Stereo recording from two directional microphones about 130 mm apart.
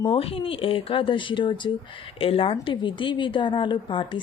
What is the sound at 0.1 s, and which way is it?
A woman's voice, 45° left (ahead or behind).